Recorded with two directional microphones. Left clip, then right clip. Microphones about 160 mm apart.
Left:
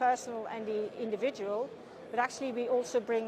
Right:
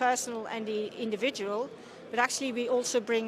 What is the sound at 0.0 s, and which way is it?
A woman's voice, 25° right (ahead or behind).